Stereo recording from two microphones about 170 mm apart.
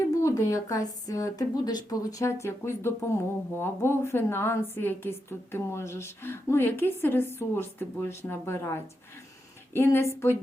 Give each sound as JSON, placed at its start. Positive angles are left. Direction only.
{"t": 0.2, "sound": "a woman's voice", "side_deg": 20}